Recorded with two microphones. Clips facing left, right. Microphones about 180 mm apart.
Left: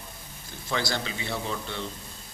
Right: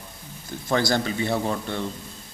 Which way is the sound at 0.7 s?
45° right (ahead or behind).